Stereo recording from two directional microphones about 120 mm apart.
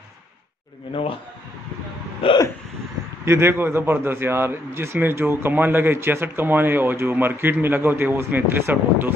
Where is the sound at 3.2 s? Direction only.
20° right (ahead or behind).